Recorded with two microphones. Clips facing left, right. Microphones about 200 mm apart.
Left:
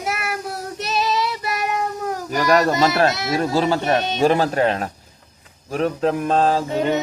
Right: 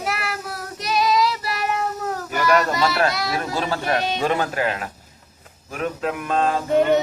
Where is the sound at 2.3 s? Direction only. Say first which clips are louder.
Left 3 dB; 35° left (ahead or behind).